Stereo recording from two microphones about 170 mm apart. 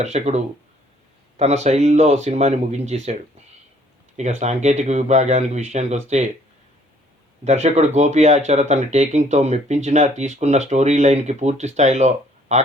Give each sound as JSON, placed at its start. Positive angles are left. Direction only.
{"t": 0.0, "sound": "speech", "side_deg": -40}
{"t": 4.2, "sound": "speech", "side_deg": -40}
{"t": 7.4, "sound": "speech", "side_deg": -40}